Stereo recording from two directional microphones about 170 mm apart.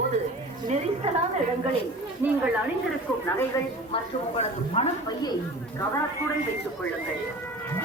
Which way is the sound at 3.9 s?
35° left (ahead or behind).